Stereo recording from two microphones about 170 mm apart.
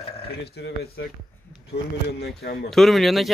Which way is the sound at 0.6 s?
80° left.